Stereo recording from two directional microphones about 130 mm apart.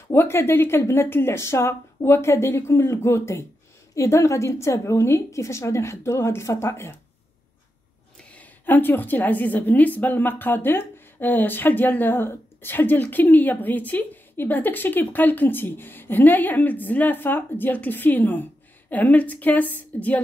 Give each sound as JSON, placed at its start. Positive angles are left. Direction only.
{"t": 0.1, "sound": "speech", "side_deg": 20}
{"t": 8.2, "sound": "a woman's voice", "side_deg": 15}